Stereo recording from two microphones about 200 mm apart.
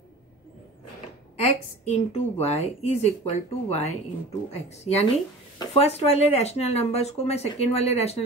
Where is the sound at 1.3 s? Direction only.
30° left (ahead or behind).